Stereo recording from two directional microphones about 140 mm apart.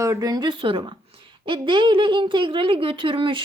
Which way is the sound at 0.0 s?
25° right (ahead or behind).